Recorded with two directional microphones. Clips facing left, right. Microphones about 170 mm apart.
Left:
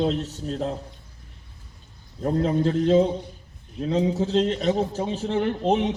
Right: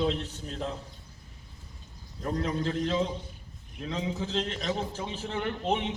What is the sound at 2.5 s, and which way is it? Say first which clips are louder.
Speech: left 8 dB; 50° left (ahead or behind).